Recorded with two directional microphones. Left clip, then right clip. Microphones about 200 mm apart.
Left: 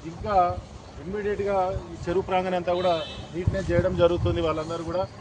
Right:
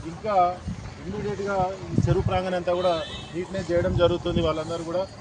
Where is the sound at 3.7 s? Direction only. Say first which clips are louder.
Even; 5° right (ahead or behind).